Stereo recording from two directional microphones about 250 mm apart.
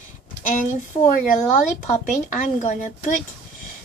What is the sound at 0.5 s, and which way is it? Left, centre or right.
A woman's voice, left.